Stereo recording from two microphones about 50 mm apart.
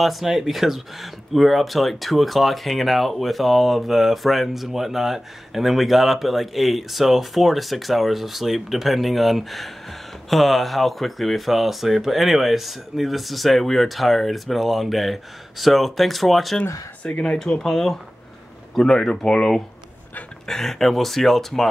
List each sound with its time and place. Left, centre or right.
0.0 s speech: centre
17.0 s speech: centre